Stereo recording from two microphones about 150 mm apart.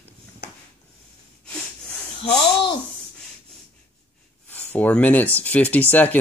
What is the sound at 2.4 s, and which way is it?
Speech, 35° left (ahead or behind).